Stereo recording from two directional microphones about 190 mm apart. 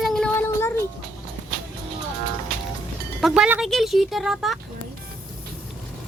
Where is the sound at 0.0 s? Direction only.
Centre (ahead or behind).